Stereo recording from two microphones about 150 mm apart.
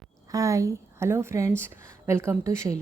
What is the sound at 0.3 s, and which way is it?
A woman's voice, 20° right (ahead or behind).